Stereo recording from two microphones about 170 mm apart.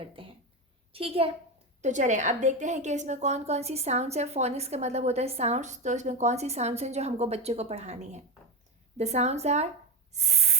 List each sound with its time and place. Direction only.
0.0 s a sound: 30° right (ahead or behind)
0.9 s a woman's voice: 35° right (ahead or behind)
1.8 s a woman's voice: 45° right (ahead or behind)
10.1 s spray: 40° right (ahead or behind)